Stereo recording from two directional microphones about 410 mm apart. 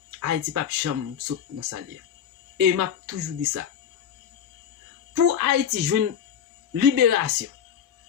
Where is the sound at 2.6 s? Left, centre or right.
Right.